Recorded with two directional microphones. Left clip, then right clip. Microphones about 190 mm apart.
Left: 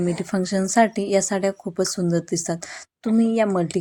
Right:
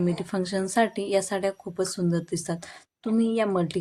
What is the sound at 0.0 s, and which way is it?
A woman's voice, 20° left (ahead or behind).